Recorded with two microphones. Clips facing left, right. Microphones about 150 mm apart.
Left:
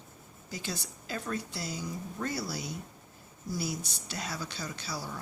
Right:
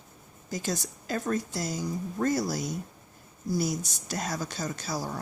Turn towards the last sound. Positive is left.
turn(degrees=-45)  # may be behind; listen again after turning